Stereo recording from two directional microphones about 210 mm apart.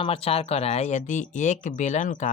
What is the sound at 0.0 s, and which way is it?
Speech, 25° left (ahead or behind).